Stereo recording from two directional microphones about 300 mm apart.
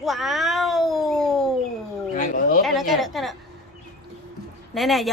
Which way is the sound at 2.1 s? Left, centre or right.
Left.